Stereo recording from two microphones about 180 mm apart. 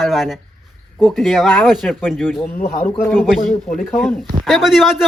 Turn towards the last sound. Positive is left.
turn(degrees=0)  # may be behind; listen again after turning